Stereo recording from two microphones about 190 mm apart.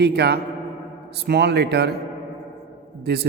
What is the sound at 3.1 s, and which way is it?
Speech, 60° right (ahead or behind).